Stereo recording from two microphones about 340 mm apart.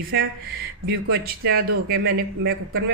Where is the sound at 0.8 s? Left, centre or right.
Right.